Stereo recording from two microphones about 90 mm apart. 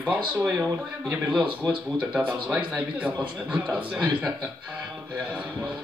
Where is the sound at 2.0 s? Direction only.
15° right (ahead or behind).